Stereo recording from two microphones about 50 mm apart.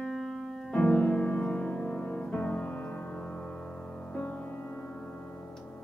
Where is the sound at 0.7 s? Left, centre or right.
Left.